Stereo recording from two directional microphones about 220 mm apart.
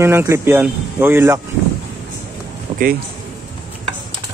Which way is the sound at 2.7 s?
25° right (ahead or behind).